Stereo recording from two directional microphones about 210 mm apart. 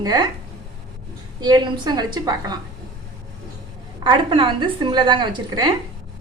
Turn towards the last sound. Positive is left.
turn(degrees=-20)  # may be behind; listen again after turning